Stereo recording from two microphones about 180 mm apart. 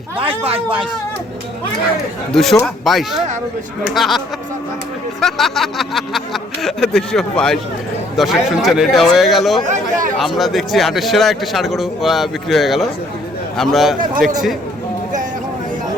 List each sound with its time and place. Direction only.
0.2 s speech: 30° right (ahead or behind)
2.3 s a man's voice: centre (ahead or behind)
5.2 s a man's voice: centre (ahead or behind)
9.6 s speech: 45° right (ahead or behind)
10.2 s a man's voice: centre (ahead or behind)